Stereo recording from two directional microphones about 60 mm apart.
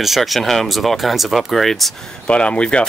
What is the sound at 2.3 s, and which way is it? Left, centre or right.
Speech, centre.